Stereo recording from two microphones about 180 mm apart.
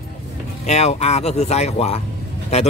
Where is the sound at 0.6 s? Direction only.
35° left (ahead or behind).